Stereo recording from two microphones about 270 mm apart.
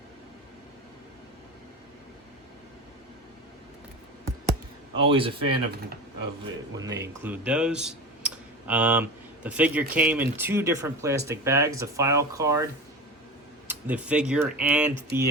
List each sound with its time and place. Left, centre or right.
4.9 s a man's voice: centre
6.7 s speech: centre
13.7 s speech: centre